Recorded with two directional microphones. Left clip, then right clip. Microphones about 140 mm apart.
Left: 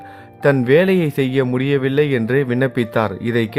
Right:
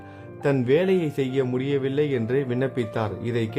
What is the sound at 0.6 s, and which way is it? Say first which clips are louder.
Speech: left 5 dB; 30° left (ahead or behind).